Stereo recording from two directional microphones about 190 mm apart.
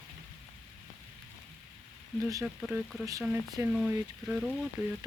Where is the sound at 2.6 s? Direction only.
5° right (ahead or behind).